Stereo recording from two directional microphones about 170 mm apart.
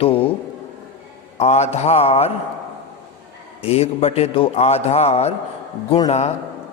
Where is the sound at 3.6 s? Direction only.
35° left (ahead or behind).